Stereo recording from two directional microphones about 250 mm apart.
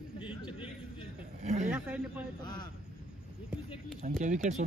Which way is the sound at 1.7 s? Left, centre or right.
Centre.